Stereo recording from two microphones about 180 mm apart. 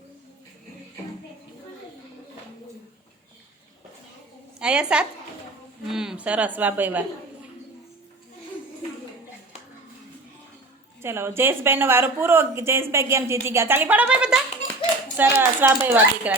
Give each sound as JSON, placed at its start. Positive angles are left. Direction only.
{"t": 4.6, "sound": "a woman's voice", "side_deg": -5}
{"t": 11.0, "sound": "speech", "side_deg": -15}